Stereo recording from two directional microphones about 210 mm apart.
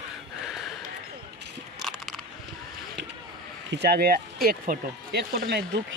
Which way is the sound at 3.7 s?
50° right (ahead or behind).